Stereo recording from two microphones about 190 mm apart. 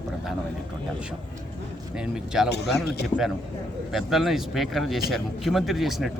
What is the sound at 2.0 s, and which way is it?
Speech, 5° right (ahead or behind).